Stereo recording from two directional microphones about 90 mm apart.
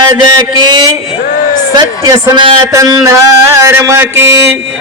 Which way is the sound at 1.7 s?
60° right (ahead or behind).